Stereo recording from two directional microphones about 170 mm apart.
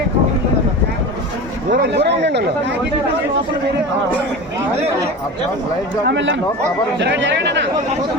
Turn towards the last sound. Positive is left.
turn(degrees=-90)